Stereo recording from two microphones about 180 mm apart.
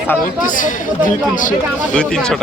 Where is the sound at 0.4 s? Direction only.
45° left (ahead or behind).